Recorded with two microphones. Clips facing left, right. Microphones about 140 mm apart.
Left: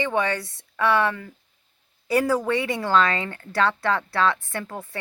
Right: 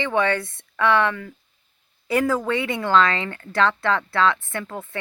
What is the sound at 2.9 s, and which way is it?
Speech, 20° left (ahead or behind).